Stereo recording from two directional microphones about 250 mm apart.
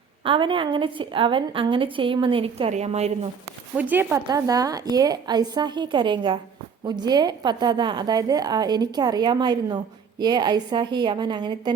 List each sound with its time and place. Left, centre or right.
0.3 s a woman's voice: centre
3.8 s a woman's voice: centre